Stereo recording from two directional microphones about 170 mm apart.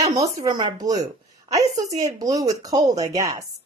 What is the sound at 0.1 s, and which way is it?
A woman's voice, 20° right (ahead or behind).